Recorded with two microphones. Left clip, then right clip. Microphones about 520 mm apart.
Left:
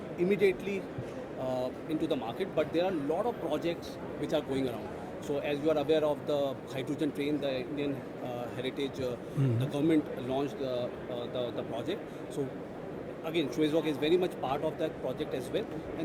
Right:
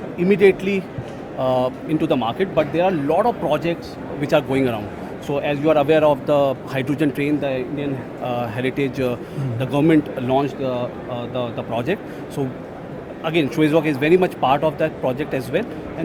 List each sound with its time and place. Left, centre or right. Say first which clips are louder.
0.3 s speech: right 14 dB; right
13.2 s speech: right 12 dB; right